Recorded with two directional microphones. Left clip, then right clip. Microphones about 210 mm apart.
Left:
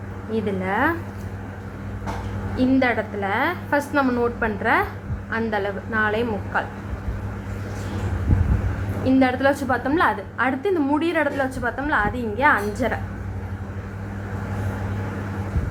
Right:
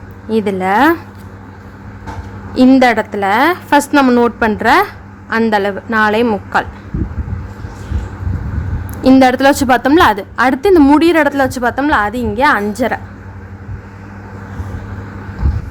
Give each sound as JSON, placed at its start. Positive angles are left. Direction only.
{"t": 0.3, "sound": "a woman's voice", "side_deg": -55}
{"t": 2.6, "sound": "a woman's voice", "side_deg": -55}
{"t": 9.0, "sound": "a woman's voice", "side_deg": -55}